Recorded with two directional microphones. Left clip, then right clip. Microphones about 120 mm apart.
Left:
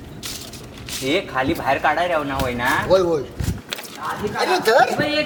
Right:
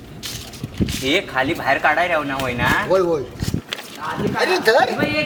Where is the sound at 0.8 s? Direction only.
15° left (ahead or behind).